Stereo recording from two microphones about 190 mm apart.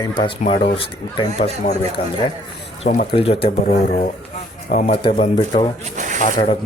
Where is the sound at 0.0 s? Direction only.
25° left (ahead or behind).